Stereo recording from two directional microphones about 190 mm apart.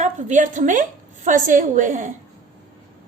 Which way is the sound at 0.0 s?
40° right (ahead or behind).